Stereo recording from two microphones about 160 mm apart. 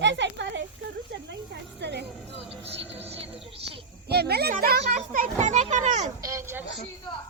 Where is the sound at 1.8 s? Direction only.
90° right.